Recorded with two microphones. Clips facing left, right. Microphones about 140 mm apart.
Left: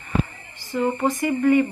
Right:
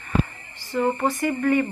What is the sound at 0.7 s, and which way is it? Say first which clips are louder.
Speech: even; 15° left (ahead or behind).